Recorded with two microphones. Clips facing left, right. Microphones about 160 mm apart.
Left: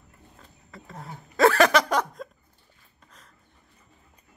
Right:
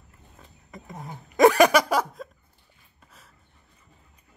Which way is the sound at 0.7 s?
15° right (ahead or behind).